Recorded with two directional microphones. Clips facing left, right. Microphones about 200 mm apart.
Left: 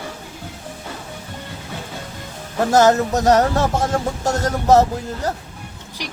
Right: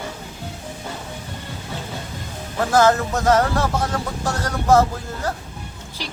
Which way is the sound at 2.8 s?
20° left (ahead or behind).